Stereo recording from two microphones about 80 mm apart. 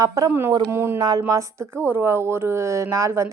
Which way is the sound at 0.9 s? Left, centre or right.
Right.